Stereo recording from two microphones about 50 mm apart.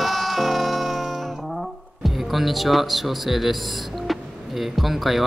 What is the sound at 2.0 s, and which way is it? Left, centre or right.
Speech, centre.